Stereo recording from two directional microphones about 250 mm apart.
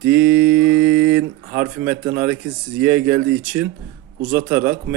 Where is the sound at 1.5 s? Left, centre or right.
Centre.